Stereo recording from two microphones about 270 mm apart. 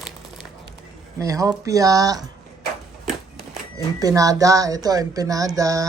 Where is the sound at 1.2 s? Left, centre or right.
Centre.